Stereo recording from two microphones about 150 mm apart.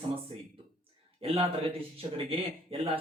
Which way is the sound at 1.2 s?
40° right (ahead or behind).